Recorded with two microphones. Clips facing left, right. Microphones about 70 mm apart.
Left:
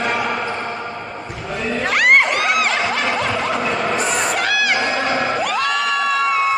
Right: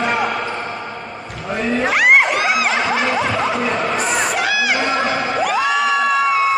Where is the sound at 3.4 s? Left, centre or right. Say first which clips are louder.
Right 1 dB; centre.